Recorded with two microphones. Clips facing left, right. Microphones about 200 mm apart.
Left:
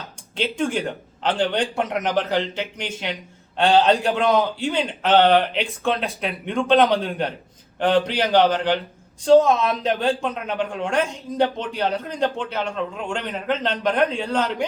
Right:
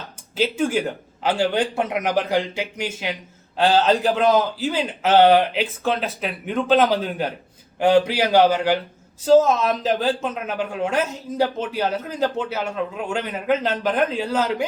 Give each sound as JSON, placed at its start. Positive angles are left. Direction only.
{"t": 0.3, "sound": "a man's voice", "side_deg": -5}